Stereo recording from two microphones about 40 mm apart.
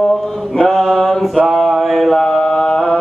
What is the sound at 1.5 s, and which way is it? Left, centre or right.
Mantra, centre.